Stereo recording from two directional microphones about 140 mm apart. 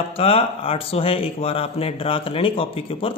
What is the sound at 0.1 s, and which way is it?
Speech, 40° left (ahead or behind).